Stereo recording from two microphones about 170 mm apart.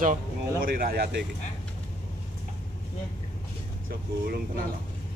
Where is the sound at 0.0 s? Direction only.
50° right (ahead or behind).